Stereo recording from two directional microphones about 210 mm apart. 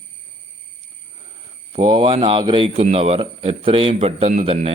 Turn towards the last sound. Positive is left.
turn(degrees=-30)  # may be behind; listen again after turning